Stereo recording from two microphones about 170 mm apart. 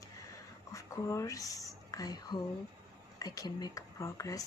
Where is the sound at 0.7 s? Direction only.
20° left (ahead or behind).